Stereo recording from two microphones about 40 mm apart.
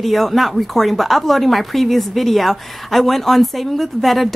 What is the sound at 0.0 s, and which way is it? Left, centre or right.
Speech, centre.